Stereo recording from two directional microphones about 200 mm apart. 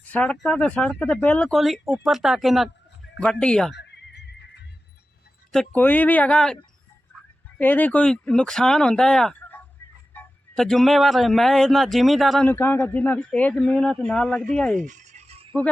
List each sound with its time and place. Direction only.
0.0 s speech: 5° left (ahead or behind)
3.8 s neigh: 60° left (ahead or behind)
5.5 s speech: 5° left (ahead or behind)
7.6 s speech: 10° left (ahead or behind)
14.8 s a sound: 40° right (ahead or behind)